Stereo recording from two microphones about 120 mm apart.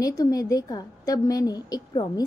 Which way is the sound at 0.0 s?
30° left (ahead or behind).